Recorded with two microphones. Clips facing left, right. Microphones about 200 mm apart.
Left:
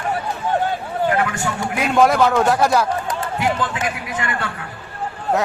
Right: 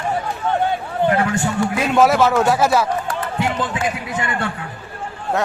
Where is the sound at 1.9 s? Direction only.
5° right (ahead or behind).